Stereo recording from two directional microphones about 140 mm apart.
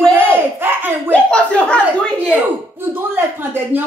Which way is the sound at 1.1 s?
10° left (ahead or behind).